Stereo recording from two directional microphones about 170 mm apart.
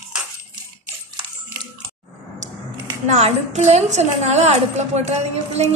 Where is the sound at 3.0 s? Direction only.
45° right (ahead or behind).